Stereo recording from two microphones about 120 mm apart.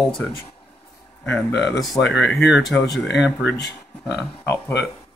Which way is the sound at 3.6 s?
30° left (ahead or behind).